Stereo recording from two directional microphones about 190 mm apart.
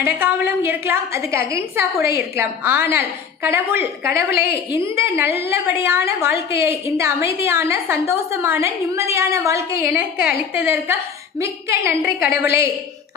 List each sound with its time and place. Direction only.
0.0 s a woman's voice: 10° right (ahead or behind)
4.1 s a woman's voice: 55° left (ahead or behind)
4.7 s a woman's voice: 15° right (ahead or behind)